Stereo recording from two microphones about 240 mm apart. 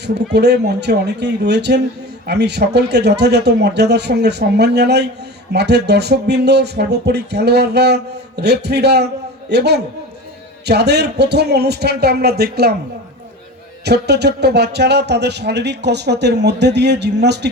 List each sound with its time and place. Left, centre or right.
0.0 s speech: right
13.8 s speech: right